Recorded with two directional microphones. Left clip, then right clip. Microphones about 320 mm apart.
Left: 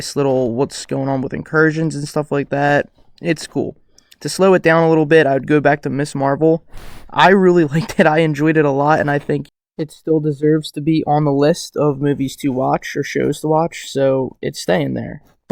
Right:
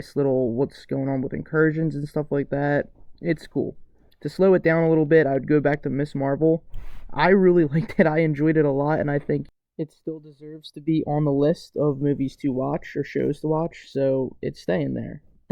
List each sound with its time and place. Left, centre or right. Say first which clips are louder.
0.2 s speech: left 6 dB; centre
11.7 s speech: left 6 dB; left
11.9 s speech: left 6 dB; centre